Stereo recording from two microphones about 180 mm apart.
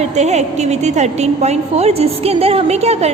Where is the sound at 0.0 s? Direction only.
40° right (ahead or behind).